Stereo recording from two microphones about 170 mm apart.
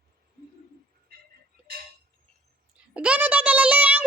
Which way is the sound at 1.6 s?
5° right (ahead or behind).